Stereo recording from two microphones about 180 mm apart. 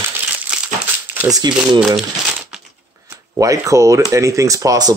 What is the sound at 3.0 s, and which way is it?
A man's voice, 20° right (ahead or behind).